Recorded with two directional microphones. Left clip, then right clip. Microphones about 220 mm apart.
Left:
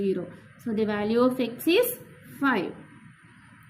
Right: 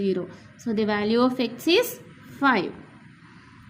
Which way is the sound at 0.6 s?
15° right (ahead or behind).